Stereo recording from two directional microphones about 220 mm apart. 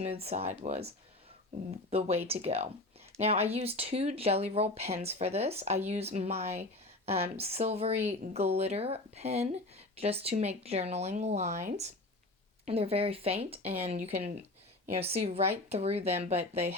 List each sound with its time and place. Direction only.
0.0 s speech: 30° right (ahead or behind)
1.9 s speech: 30° right (ahead or behind)